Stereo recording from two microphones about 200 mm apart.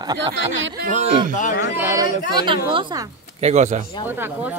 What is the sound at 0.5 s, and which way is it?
Speech, 65° right (ahead or behind).